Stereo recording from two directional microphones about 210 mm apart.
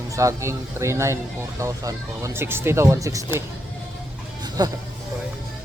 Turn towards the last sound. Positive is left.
turn(degrees=-20)  # may be behind; listen again after turning